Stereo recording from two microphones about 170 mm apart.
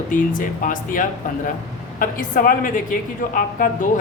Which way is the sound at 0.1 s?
50° left (ahead or behind).